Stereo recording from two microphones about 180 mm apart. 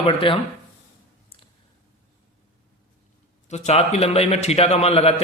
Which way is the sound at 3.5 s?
40° left (ahead or behind).